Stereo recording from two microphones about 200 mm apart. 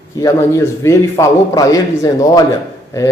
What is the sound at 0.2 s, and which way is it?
A man's voice, 15° left (ahead or behind).